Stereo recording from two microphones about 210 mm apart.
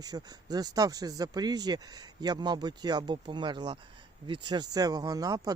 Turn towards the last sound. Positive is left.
turn(degrees=-15)  # may be behind; listen again after turning